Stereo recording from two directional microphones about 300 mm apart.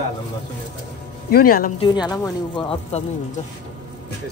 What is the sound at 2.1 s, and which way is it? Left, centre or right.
Speech, centre.